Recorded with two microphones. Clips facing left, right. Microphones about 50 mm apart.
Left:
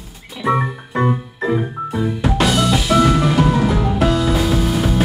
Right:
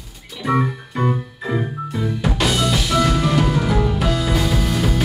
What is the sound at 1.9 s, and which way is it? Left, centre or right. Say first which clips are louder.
Music: left 4 dB; centre.